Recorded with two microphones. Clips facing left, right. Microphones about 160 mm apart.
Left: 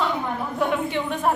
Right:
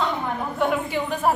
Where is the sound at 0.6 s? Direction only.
Centre (ahead or behind).